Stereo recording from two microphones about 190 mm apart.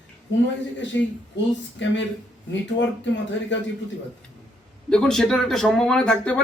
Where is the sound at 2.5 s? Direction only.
70° left (ahead or behind).